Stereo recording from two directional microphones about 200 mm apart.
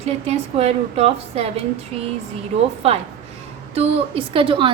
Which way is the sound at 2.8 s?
30° right (ahead or behind).